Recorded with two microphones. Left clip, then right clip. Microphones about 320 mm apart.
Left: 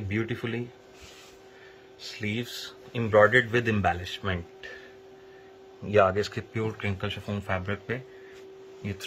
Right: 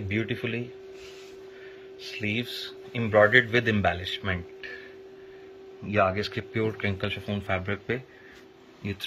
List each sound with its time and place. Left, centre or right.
0.1 s speech: centre
2.2 s speech: centre
5.9 s speech: left
6.5 s speech: centre